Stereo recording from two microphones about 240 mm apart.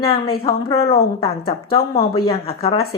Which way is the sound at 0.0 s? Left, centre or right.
Left.